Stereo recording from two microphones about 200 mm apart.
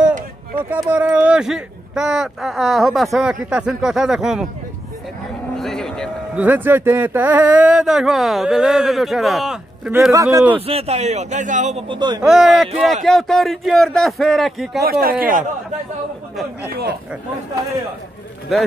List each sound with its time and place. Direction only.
0.7 s speech: 10° right (ahead or behind)
5.6 s a sound: centre (ahead or behind)
6.4 s speech: 10° right (ahead or behind)
10.1 s speech: 15° right (ahead or behind)
10.7 s speech: 30° right (ahead or behind)
11.9 s speech: 20° right (ahead or behind)
12.2 s speech: centre (ahead or behind)
14.8 s speech: 50° right (ahead or behind)
16.6 s speech: 55° right (ahead or behind)